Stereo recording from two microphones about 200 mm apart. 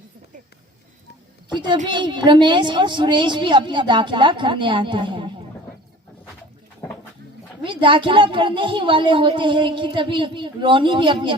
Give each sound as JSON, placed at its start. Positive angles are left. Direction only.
{"t": 1.5, "sound": "a woman's voice", "side_deg": -20}
{"t": 7.6, "sound": "a woman's voice", "side_deg": -25}